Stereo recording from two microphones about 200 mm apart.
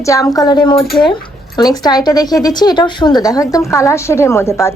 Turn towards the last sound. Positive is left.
turn(degrees=15)  # may be behind; listen again after turning